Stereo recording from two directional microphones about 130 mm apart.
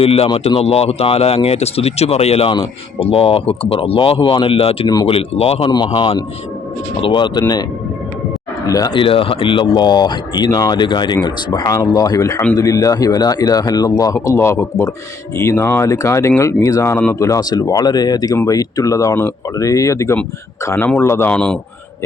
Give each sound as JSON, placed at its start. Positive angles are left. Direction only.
{"t": 0.0, "sound": "speech", "side_deg": 50}
{"t": 5.7, "sound": "speech", "side_deg": 35}
{"t": 8.6, "sound": "speech", "side_deg": 25}
{"t": 8.9, "sound": "speech", "side_deg": 40}